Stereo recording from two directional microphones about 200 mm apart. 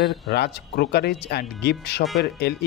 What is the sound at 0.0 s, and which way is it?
Speech, 55° left (ahead or behind).